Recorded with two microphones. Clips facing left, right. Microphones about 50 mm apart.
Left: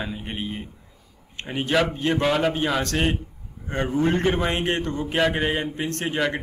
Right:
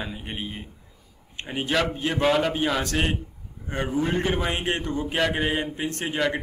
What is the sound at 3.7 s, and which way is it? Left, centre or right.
A man's voice, centre.